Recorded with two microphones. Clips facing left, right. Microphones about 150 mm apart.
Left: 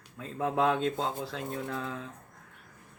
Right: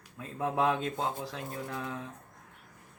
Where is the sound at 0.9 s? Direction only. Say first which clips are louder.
Left 1 dB; 15° right (ahead or behind).